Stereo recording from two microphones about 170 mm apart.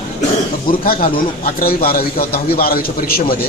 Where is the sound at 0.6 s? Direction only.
55° left (ahead or behind).